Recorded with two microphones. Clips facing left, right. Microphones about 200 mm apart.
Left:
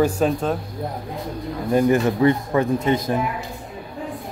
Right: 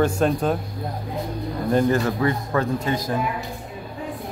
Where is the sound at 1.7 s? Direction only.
20° left (ahead or behind).